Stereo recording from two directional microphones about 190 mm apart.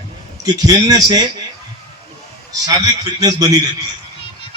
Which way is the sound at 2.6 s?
20° right (ahead or behind).